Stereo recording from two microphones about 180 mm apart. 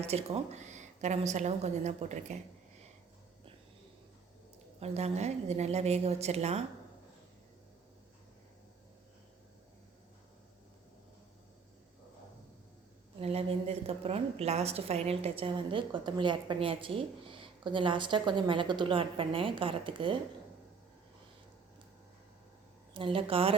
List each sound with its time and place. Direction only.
0.0 s a woman's voice: 35° right (ahead or behind)
4.8 s a woman's voice: 35° right (ahead or behind)
13.1 s a woman's voice: 30° right (ahead or behind)
23.0 s a woman's voice: 30° right (ahead or behind)